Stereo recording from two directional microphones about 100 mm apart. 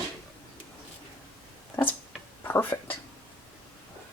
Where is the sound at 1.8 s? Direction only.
30° left (ahead or behind).